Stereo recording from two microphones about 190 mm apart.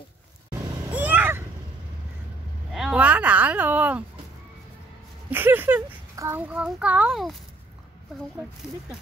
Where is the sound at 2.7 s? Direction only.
Centre (ahead or behind).